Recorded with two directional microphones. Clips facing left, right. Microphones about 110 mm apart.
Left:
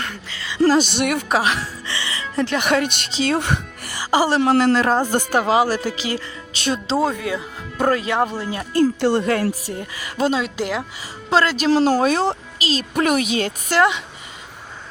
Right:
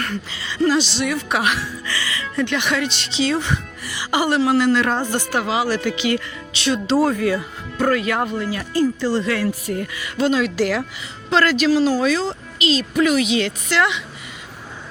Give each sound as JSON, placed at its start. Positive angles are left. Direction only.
{"t": 0.7, "sound": "speech", "side_deg": 50}
{"t": 1.3, "sound": "speech", "side_deg": 30}
{"t": 1.9, "sound": "music", "side_deg": 25}
{"t": 2.6, "sound": "speech", "side_deg": 50}
{"t": 6.5, "sound": "speech", "side_deg": 45}
{"t": 7.0, "sound": "speech", "side_deg": 15}
{"t": 7.8, "sound": "speech", "side_deg": 30}
{"t": 8.7, "sound": "speech", "side_deg": 60}
{"t": 9.2, "sound": "speech", "side_deg": 40}
{"t": 9.7, "sound": "speech", "side_deg": 25}
{"t": 10.0, "sound": "speech", "side_deg": 40}
{"t": 10.3, "sound": "speech", "side_deg": 25}
{"t": 12.0, "sound": "speech", "side_deg": 55}
{"t": 12.5, "sound": "speech", "side_deg": 40}